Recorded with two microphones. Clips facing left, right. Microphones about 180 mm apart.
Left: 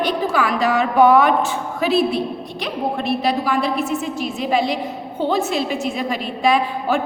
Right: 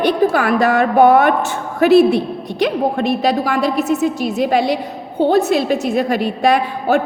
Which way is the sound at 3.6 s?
40° right (ahead or behind).